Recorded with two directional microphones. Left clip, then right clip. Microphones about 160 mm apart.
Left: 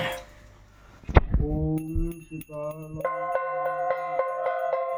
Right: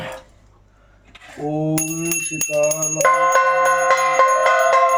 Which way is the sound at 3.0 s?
35° left (ahead or behind).